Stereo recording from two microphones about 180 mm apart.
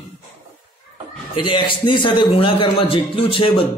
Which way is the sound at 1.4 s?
30° left (ahead or behind).